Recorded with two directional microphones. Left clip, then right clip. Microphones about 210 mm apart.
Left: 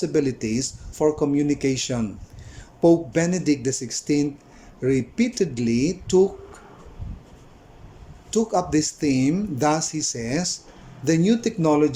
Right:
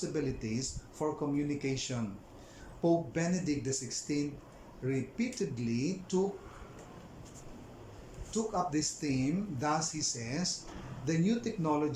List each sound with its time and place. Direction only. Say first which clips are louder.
0.1 s speech: left 13 dB; 45° left (ahead or behind)
8.3 s speech: left 12 dB; 45° left (ahead or behind)